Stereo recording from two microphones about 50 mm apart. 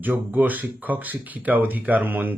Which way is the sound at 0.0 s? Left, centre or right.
Right.